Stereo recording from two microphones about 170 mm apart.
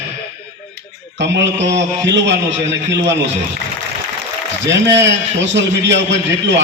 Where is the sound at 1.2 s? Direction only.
90° right.